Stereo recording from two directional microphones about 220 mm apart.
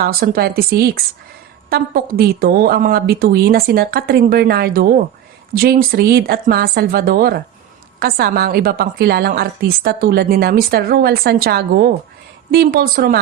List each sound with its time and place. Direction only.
0.0 s a woman's voice: 45° right (ahead or behind)